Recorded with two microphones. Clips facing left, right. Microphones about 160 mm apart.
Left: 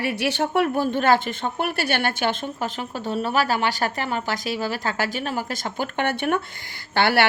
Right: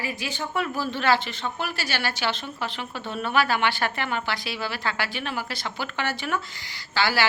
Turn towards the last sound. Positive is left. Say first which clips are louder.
# left 5 dB
turn(degrees=60)  # may be behind; listen again after turning